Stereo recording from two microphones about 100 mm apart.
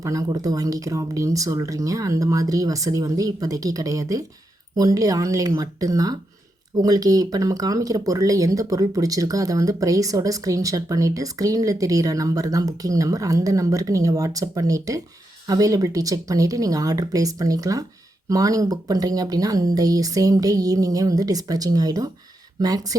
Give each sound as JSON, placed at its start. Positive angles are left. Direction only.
{"t": 0.0, "sound": "speech", "side_deg": -35}